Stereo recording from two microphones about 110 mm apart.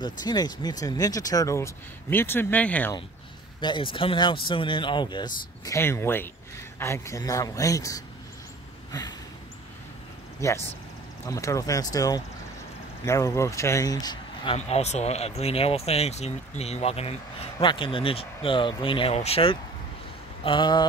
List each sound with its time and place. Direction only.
0.0 s speech: 40° left (ahead or behind); by 2.9 s 15° left (ahead or behind)
3.6 s speech: 50° left (ahead or behind)
5.8 s speech: 20° left (ahead or behind)
10.4 s speech: 30° left (ahead or behind)
14.7 s speech: 85° left; by 17.6 s 65° left (ahead or behind)
17.6 s speech: 50° left (ahead or behind)
19.1 s speech: 65° left (ahead or behind)
20.4 s speech: 45° left (ahead or behind)